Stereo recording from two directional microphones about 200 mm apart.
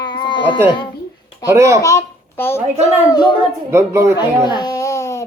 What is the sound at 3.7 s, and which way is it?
Speech, 15° right (ahead or behind).